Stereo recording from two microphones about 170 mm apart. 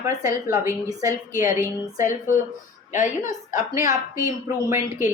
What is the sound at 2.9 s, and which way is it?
Speech, 45° left (ahead or behind).